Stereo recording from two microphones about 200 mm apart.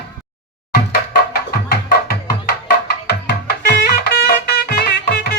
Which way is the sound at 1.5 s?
50° left (ahead or behind).